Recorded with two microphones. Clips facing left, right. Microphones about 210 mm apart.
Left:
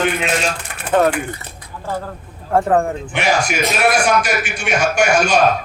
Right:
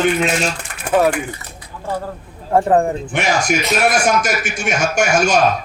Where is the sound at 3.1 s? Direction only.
45° right (ahead or behind).